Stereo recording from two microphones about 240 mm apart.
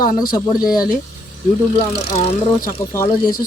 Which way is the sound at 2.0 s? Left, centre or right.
Left.